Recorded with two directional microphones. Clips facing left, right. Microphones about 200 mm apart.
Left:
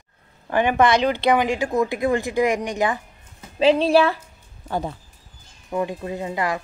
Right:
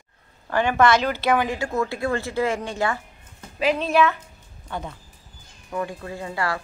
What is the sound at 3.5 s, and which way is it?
A woman's voice, 30° left (ahead or behind).